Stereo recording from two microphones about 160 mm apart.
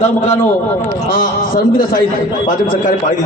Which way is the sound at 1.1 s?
65° left (ahead or behind).